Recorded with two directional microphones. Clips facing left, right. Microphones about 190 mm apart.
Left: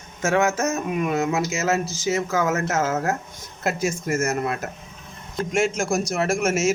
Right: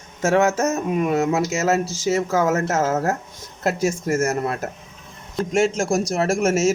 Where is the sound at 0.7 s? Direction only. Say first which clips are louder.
Right 3 dB; 25° right (ahead or behind).